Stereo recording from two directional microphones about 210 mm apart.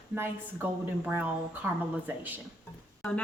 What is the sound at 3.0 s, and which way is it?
Speech, 5° left (ahead or behind).